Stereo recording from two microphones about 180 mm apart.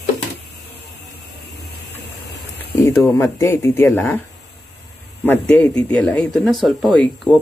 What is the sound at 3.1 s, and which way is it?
Speech, 15° left (ahead or behind).